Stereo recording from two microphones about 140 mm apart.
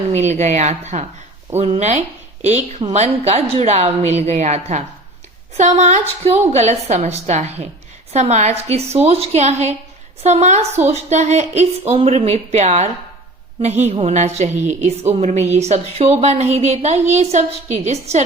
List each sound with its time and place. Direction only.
0.1 s a woman's voice: 55° right (ahead or behind)